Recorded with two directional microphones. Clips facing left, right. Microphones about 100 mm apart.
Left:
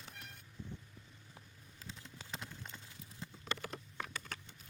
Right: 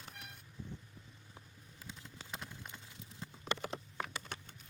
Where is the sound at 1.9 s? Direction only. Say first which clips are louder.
Even; 10° right (ahead or behind).